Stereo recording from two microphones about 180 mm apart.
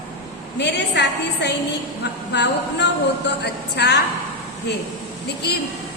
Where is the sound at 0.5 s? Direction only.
70° left (ahead or behind).